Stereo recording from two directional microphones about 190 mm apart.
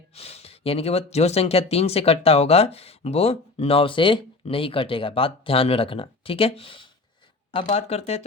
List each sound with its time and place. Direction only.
0.2 s speech: 30° left (ahead or behind)